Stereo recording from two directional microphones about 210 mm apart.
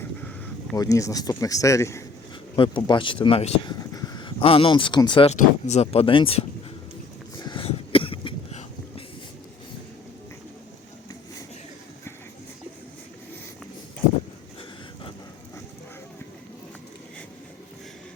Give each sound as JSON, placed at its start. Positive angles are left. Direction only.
{"t": 0.0, "sound": "a sound", "side_deg": 5}
{"t": 0.8, "sound": "speech", "side_deg": 15}
{"t": 7.3, "sound": "cough", "side_deg": 20}